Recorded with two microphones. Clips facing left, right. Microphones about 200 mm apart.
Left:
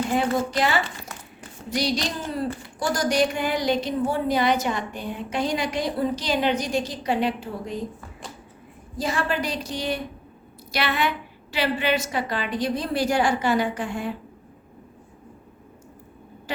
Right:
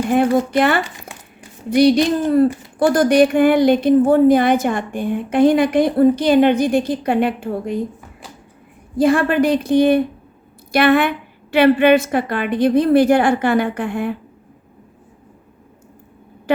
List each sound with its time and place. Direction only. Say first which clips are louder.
0.5 s a woman's voice: right 7 dB; 55° right (ahead or behind)
9.0 s a woman's voice: right 12 dB; 55° right (ahead or behind)